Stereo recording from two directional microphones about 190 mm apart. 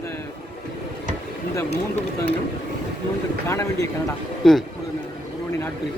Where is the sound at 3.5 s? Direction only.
15° left (ahead or behind).